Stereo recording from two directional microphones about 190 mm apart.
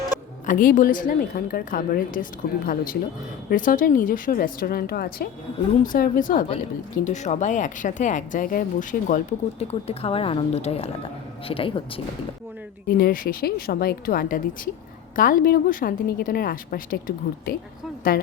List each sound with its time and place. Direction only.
0.4 s a woman's voice: 45° left (ahead or behind); by 12.0 s 30° left (ahead or behind)
12.9 s a woman's voice: 50° left (ahead or behind)